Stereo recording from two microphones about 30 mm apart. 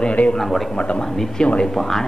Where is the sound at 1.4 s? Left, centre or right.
Left.